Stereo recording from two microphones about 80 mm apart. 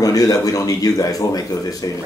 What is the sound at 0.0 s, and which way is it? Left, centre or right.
Speech, left.